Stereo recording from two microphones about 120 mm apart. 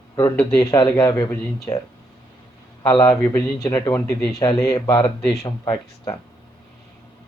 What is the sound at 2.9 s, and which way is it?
Speech, 35° left (ahead or behind).